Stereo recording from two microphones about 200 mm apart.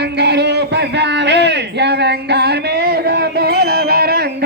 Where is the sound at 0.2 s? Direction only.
55° right (ahead or behind).